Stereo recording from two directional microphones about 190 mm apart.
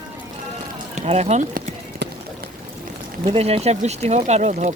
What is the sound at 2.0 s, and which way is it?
Run, 65° right (ahead or behind).